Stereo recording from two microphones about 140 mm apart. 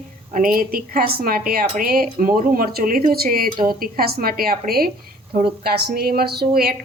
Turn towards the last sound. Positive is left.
turn(degrees=-90)